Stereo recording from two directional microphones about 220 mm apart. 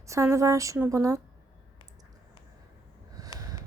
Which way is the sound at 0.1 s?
15° right (ahead or behind).